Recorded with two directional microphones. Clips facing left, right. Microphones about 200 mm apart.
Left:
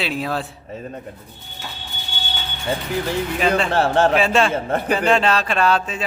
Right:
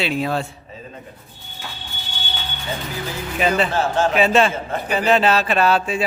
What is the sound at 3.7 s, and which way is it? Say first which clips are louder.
Speech: left 3 dB; 60° left (ahead or behind).